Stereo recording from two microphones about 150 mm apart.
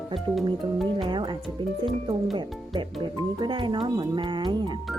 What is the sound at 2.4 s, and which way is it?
Speech, 30° right (ahead or behind).